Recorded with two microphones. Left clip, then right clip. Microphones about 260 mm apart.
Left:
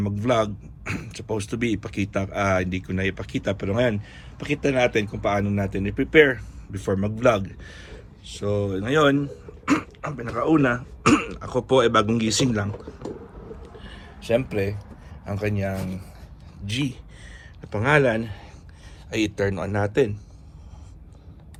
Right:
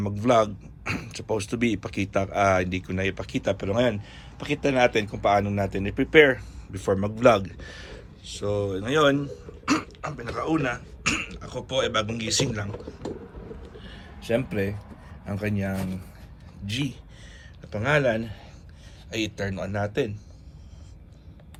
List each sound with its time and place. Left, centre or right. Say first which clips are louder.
0.0 s speech: right 1 dB; centre
13.6 s a sound: left 2 dB; left
15.3 s a man's voice: left 3 dB; left